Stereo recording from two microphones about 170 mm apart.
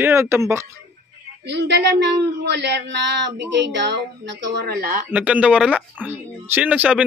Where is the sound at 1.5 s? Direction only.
80° right; by 5.0 s 65° right (ahead or behind).